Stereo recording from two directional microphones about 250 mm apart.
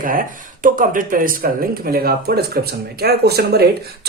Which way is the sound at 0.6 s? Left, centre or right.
Right.